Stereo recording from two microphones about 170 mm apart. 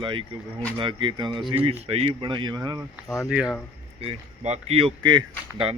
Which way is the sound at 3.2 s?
5° right (ahead or behind).